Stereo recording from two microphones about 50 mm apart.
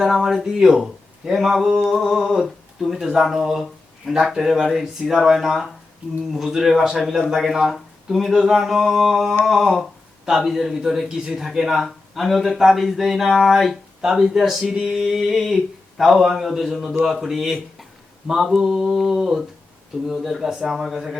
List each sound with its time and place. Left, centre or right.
0.0 s speech: centre
20.4 s speech: centre